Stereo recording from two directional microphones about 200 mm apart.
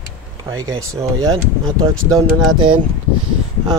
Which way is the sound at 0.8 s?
15° right (ahead or behind).